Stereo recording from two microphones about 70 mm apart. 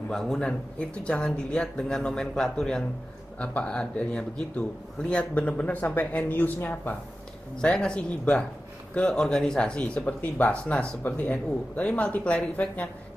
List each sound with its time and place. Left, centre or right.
0.1 s speech: centre; by 7.0 s left
7.6 s speech: centre